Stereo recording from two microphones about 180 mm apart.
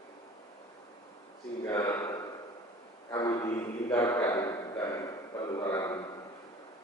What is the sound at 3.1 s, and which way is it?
Speech, 20° left (ahead or behind).